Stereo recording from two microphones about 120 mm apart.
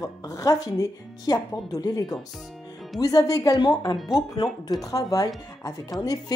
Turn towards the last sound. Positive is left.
turn(degrees=30)  # may be behind; listen again after turning